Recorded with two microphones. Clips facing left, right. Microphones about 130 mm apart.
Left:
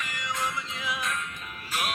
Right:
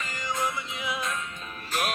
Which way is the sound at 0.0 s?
30° right (ahead or behind).